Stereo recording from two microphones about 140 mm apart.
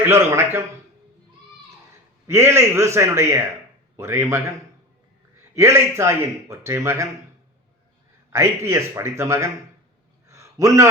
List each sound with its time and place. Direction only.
0.0 s a man's voice: 20° right (ahead or behind)
2.2 s speech: 20° right (ahead or behind)
5.5 s speech: 20° right (ahead or behind)
8.3 s speech: 20° right (ahead or behind)
10.2 s a sound: 20° right (ahead or behind)